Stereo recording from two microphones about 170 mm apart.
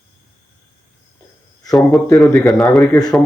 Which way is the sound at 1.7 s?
Centre (ahead or behind).